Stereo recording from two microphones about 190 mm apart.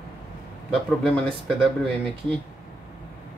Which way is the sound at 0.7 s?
5° left (ahead or behind).